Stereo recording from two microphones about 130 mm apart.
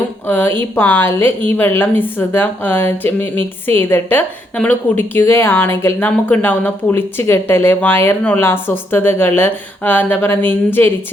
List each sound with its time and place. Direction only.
0.3 s a woman's voice: 15° left (ahead or behind)